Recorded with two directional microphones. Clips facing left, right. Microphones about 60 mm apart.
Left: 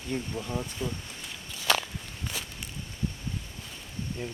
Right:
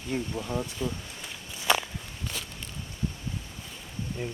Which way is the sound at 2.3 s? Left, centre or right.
Centre.